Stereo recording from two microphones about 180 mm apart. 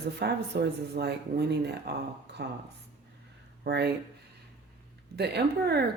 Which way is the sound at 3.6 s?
70° right (ahead or behind).